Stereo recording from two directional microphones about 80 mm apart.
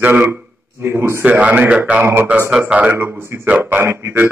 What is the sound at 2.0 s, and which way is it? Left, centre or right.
Speech, right.